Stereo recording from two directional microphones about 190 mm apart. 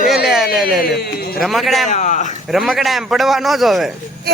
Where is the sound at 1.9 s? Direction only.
40° left (ahead or behind).